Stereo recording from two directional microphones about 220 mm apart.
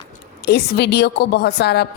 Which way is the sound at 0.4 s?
45° left (ahead or behind).